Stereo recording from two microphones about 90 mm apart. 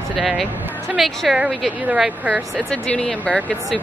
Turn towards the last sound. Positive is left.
turn(degrees=10)  # may be behind; listen again after turning